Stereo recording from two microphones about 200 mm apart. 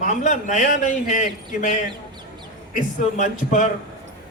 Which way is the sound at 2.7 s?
40° left (ahead or behind).